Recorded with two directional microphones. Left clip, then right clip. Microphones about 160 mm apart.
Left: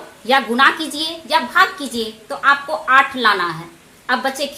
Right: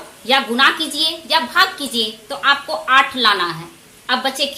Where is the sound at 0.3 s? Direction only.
20° left (ahead or behind).